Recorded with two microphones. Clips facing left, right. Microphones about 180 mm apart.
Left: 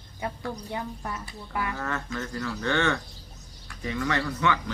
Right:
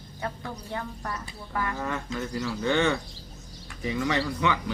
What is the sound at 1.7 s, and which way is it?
Speech, 15° right (ahead or behind).